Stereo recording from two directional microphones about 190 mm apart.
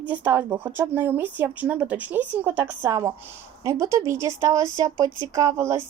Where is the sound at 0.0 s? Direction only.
10° right (ahead or behind).